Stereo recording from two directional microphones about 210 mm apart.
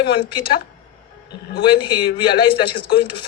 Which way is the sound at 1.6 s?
20° left (ahead or behind).